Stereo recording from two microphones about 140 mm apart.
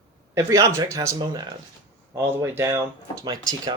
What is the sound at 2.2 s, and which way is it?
Speech, 15° right (ahead or behind).